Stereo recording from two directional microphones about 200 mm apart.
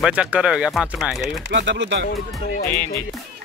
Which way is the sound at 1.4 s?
65° right (ahead or behind).